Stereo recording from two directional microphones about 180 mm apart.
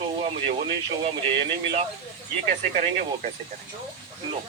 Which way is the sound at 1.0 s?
30° right (ahead or behind).